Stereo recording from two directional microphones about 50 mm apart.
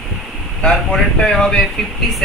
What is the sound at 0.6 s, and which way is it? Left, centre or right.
Speech, centre.